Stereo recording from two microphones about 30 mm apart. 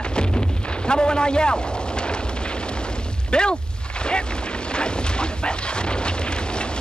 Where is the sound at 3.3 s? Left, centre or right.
Left.